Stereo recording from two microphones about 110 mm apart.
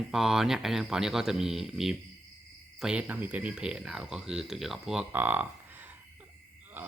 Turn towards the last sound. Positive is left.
turn(degrees=-15)  # may be behind; listen again after turning